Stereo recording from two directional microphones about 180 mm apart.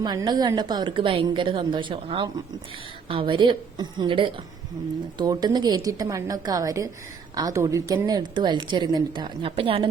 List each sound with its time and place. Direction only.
0.0 s a woman's voice: 20° right (ahead or behind)